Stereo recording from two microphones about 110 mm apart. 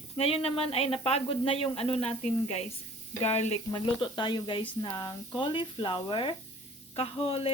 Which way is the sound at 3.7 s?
40° left (ahead or behind).